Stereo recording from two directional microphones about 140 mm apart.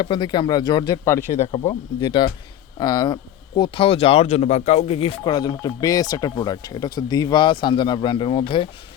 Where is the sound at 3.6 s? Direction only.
40° left (ahead or behind).